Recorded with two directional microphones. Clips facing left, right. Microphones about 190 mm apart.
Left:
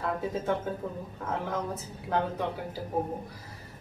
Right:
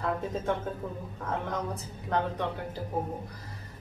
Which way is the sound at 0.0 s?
5° left (ahead or behind).